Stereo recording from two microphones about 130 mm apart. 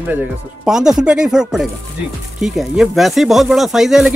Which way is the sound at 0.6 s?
5° right (ahead or behind).